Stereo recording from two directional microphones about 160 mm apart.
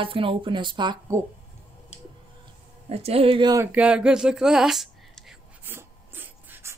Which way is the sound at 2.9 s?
40° right (ahead or behind).